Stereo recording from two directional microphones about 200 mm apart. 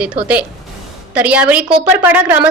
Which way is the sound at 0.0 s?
5° right (ahead or behind).